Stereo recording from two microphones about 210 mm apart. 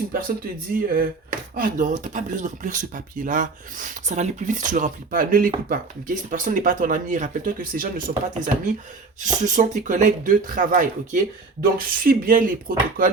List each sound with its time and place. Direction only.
0.1 s speech: 45° right (ahead or behind)